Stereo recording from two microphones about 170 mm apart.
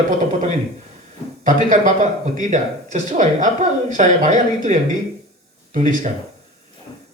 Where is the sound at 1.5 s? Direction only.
50° right (ahead or behind).